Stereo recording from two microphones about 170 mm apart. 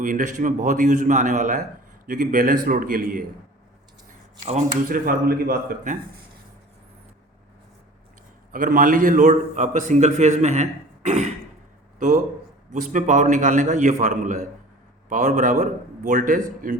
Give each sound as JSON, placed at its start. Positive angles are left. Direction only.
{"t": 0.0, "sound": "a man's voice", "side_deg": -50}
{"t": 4.9, "sound": "a man's voice", "side_deg": -55}
{"t": 8.5, "sound": "a man's voice", "side_deg": -50}